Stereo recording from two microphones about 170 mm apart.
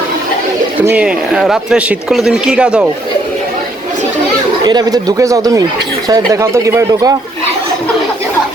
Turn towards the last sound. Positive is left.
turn(degrees=-15)  # may be behind; listen again after turning